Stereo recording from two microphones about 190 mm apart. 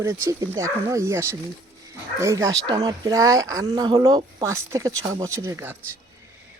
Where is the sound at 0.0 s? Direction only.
15° right (ahead or behind).